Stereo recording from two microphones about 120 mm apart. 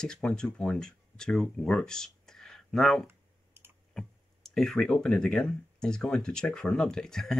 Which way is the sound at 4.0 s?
5° left (ahead or behind).